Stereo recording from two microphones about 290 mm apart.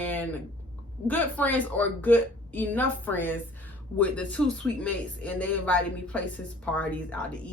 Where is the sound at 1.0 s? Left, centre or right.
Centre.